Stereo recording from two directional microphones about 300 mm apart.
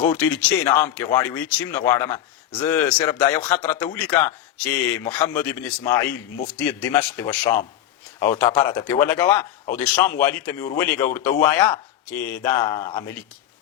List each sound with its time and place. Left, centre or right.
0.0 s a man's voice: centre